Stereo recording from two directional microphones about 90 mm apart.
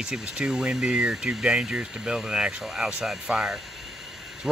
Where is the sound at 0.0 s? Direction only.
5° right (ahead or behind).